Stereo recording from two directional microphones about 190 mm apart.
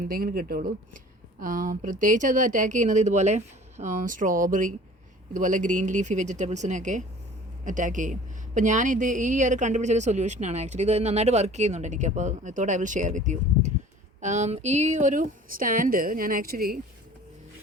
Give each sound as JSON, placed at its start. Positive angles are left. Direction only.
{"t": 0.0, "sound": "a woman's voice", "side_deg": -50}